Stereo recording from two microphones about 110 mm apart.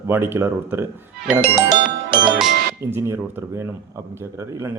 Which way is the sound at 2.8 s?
25° right (ahead or behind).